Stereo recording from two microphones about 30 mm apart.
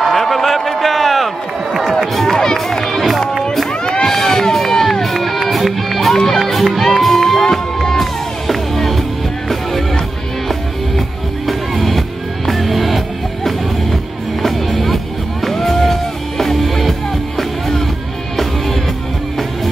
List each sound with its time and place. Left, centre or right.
0.1 s a sound: centre
1.7 s music: centre
2.5 s run: centre
4.0 s music: centre
7.3 s music: centre
8.0 s music: centre
11.4 s music: centre